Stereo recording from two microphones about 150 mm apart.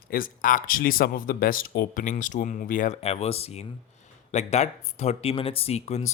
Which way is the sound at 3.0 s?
45° left (ahead or behind).